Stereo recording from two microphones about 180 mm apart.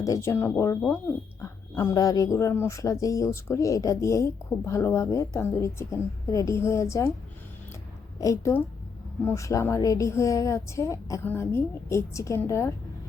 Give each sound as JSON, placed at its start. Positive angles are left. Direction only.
{"t": 0.0, "sound": "a woman's voice", "side_deg": 15}
{"t": 8.2, "sound": "a woman's voice", "side_deg": 15}